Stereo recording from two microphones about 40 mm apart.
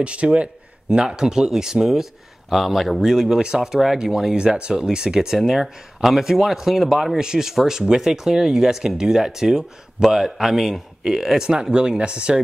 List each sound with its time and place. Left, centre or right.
0.0 s speech: right; by 3.0 s centre
3.0 s speech: centre